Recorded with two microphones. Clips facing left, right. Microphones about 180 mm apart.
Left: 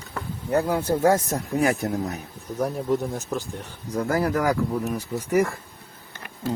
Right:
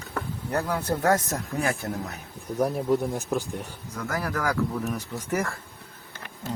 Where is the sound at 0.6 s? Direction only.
25° left (ahead or behind).